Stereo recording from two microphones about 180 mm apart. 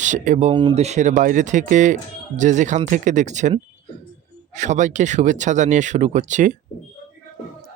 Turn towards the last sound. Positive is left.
turn(degrees=-40)  # may be behind; listen again after turning